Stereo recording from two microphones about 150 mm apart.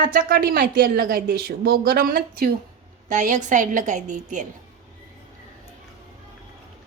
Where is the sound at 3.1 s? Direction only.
55° right (ahead or behind).